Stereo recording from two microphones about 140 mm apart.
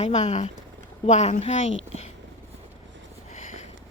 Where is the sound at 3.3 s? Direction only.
60° left (ahead or behind).